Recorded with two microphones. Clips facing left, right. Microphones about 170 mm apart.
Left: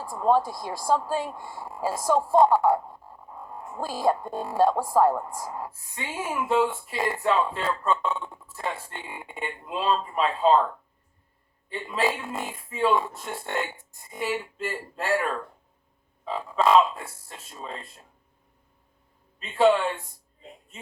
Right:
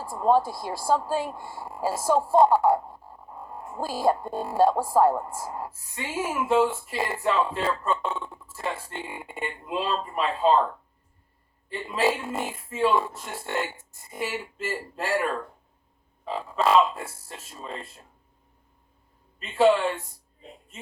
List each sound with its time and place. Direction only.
0.0 s speech: 5° right (ahead or behind)
11.7 s speech: 5° right (ahead or behind)
19.5 s speech: 5° right (ahead or behind)